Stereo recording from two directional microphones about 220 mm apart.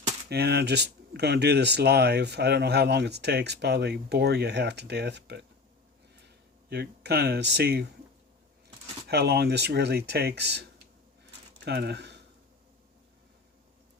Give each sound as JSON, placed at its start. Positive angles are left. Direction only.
{"t": 0.3, "sound": "speech", "side_deg": -45}
{"t": 6.7, "sound": "speech", "side_deg": -50}
{"t": 9.0, "sound": "speech", "side_deg": -45}